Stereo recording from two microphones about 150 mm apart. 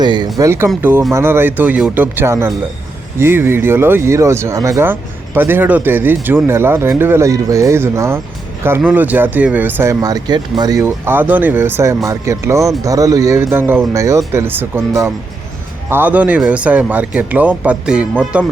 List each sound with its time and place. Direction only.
0.0 s speech: 30° right (ahead or behind); by 18.4 s 10° right (ahead or behind)